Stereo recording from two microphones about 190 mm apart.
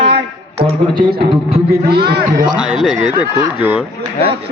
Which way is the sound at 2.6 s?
5° right (ahead or behind).